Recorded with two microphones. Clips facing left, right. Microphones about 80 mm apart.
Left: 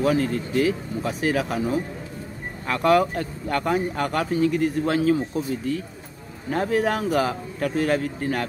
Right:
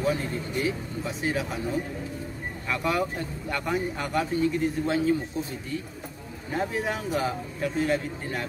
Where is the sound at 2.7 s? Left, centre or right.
Left.